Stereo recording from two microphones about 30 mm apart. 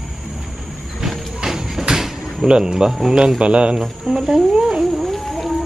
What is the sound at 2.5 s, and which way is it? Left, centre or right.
Speech, right.